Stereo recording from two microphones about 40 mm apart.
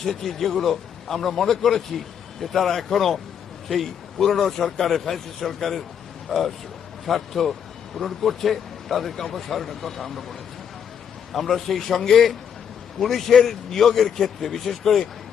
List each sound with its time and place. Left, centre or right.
0.0 s speech: centre
4.2 s a man's voice: centre
11.3 s speech: centre